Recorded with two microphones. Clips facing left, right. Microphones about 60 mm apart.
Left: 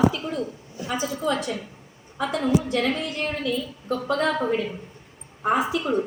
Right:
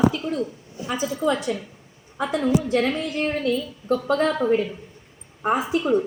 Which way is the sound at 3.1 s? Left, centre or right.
Right.